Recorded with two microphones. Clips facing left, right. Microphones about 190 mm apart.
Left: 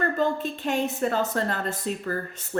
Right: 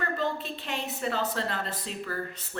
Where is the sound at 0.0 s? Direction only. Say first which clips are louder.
Left 6 dB; 45° left (ahead or behind).